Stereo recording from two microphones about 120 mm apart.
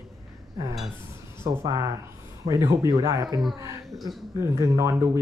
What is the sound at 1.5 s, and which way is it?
Speech, 25° right (ahead or behind).